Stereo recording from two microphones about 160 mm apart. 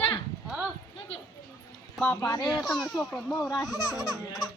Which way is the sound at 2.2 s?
25° left (ahead or behind).